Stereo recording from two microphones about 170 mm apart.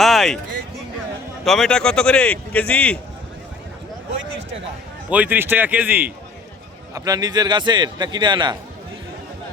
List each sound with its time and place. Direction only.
0.0 s a sound: centre (ahead or behind)
1.5 s speech: 5° left (ahead or behind)
5.0 s a man's voice: 10° right (ahead or behind)
6.9 s a man's voice: 20° right (ahead or behind)